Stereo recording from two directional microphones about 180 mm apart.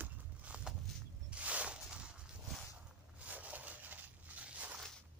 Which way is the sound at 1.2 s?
5° right (ahead or behind).